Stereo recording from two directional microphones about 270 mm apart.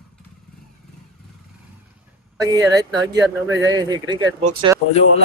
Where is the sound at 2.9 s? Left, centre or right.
Centre.